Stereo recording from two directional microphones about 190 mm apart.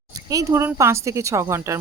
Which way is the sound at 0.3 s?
15° right (ahead or behind).